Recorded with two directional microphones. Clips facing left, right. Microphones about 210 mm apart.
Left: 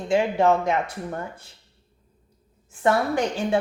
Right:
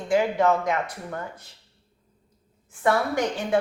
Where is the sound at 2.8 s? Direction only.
30° left (ahead or behind).